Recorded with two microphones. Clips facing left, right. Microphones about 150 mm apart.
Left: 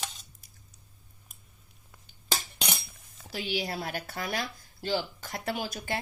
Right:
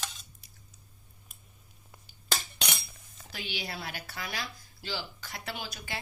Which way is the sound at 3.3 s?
35° left (ahead or behind).